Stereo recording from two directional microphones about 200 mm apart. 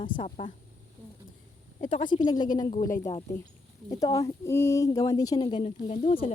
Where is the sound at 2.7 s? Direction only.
40° left (ahead or behind).